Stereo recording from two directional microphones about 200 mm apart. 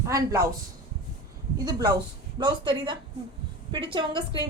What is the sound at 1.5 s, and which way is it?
A woman's voice, 20° right (ahead or behind).